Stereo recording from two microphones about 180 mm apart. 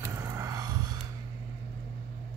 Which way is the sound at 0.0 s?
15° right (ahead or behind).